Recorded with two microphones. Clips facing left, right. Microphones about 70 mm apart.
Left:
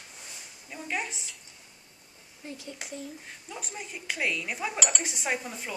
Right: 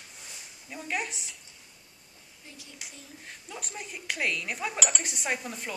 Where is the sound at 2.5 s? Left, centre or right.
Left.